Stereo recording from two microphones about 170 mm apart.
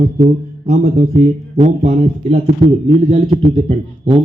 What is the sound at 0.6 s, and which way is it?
Speech, 45° right (ahead or behind).